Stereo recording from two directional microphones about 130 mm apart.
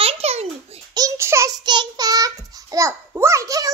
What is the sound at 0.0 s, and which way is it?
Babbling, 55° right (ahead or behind).